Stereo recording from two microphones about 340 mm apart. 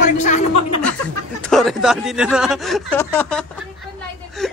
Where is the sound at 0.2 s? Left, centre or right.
Left.